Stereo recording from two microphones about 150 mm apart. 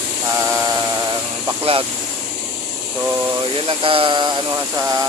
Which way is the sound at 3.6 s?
40° right (ahead or behind).